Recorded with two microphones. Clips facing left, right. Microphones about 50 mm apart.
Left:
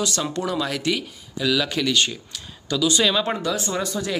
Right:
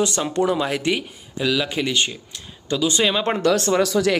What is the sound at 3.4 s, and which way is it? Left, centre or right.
Speech, right.